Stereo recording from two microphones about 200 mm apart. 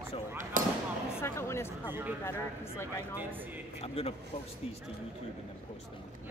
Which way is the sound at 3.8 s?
30° left (ahead or behind).